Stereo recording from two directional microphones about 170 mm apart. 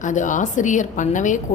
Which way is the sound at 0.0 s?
50° left (ahead or behind).